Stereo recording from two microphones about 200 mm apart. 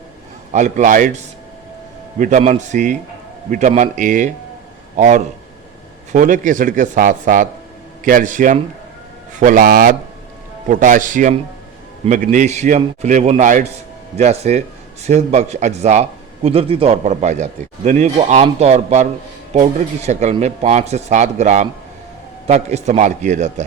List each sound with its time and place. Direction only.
0.5 s a man's voice: 35° right (ahead or behind)